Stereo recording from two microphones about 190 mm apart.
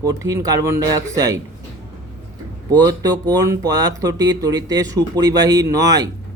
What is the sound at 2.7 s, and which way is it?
Speech, 20° right (ahead or behind).